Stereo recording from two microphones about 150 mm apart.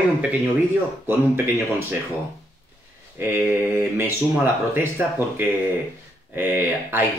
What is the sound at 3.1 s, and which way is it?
Speech, 15° right (ahead or behind).